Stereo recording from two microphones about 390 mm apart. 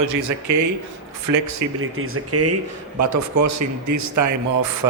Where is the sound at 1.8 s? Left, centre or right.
Right.